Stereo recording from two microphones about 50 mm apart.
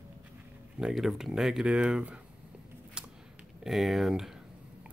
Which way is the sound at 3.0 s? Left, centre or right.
Centre.